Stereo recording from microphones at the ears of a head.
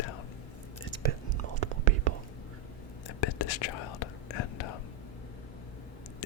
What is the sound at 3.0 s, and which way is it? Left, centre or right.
Whispering, left.